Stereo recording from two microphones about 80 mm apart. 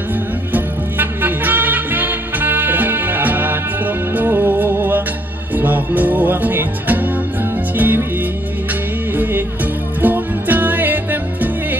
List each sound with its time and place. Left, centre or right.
0.5 s music: right
9.1 s music: right